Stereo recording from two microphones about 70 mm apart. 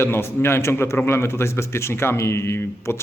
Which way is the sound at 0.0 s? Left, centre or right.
Left.